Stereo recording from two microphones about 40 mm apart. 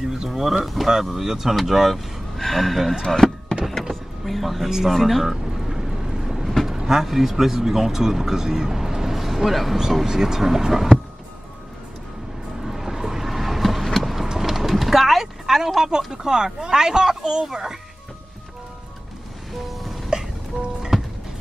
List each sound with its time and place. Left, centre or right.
0.3 s speech: centre
2.3 s speech: centre
3.1 s power windows: centre
4.2 s speech: centre
4.8 s vehicle: centre
6.7 s speech: centre
10.0 s speech: centre
12.6 s vehicle: centre
14.2 s a sound: centre
20.1 s music: centre